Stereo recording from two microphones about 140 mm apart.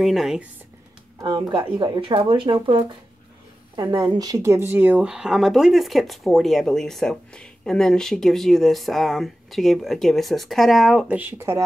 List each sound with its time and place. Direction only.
0.0 s speech: centre (ahead or behind)
1.2 s speech: 35° right (ahead or behind); by 11.1 s centre (ahead or behind)
11.1 s speech: 15° right (ahead or behind)